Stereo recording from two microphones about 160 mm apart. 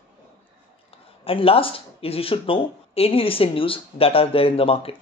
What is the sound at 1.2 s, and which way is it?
Speech, 35° left (ahead or behind).